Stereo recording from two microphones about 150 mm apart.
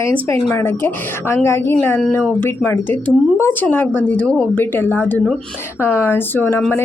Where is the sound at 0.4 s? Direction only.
15° left (ahead or behind).